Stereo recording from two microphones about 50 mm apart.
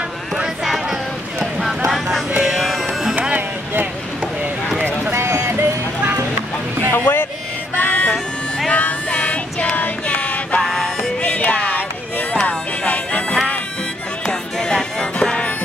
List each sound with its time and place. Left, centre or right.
1.4 s run: centre
1.9 s music: centre
3.2 s music: right
5.1 s a sound: right
6.9 s vehicle: left
7.7 s music: left
10.6 s music: centre
11.1 s music: left
14.2 s music: centre